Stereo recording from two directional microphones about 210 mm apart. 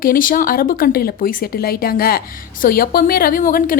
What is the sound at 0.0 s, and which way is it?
A woman's voice, 40° left (ahead or behind).